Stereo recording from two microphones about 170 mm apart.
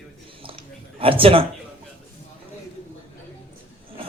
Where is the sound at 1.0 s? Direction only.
30° right (ahead or behind).